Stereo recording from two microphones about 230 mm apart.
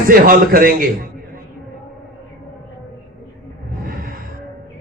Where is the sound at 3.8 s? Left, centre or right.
Right.